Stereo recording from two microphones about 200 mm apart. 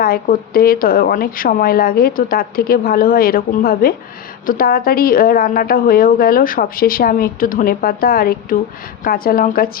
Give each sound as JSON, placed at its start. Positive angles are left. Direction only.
{"t": 0.0, "sound": "a woman's voice", "side_deg": 45}